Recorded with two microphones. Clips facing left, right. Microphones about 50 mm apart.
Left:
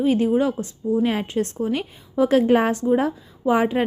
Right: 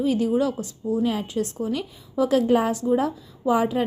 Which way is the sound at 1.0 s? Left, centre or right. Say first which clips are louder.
Left 2 dB; left.